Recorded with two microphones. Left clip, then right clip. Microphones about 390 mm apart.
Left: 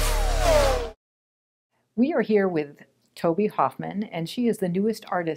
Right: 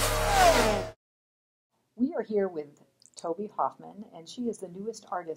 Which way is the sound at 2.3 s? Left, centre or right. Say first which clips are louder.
Left 7 dB; left.